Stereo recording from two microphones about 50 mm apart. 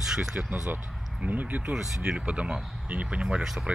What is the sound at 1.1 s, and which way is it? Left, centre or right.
Speech, right.